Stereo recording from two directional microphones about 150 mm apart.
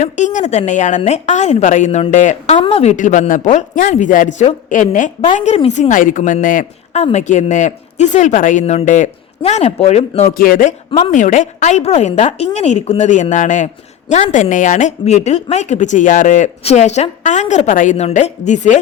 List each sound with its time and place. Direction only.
0.0 s speech: 55° left (ahead or behind)
2.6 s a woman's voice: 40° left (ahead or behind); by 5.1 s 60° left (ahead or behind)
5.5 s speech: 45° left (ahead or behind)
5.9 s a woman's voice: 60° left (ahead or behind)
7.0 s speech: 50° left (ahead or behind)
10.3 s a man's voice: 75° left (ahead or behind)
11.1 s speech: 55° left (ahead or behind)